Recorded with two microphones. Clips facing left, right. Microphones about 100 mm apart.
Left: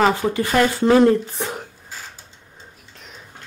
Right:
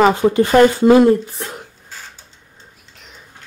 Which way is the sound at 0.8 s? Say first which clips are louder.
Right 4 dB; 10° right (ahead or behind).